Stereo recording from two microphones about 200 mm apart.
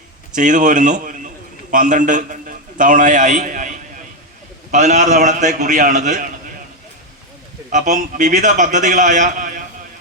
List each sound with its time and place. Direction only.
0.3 s a man's voice: 40° right (ahead or behind)
7.7 s a man's voice: 40° right (ahead or behind)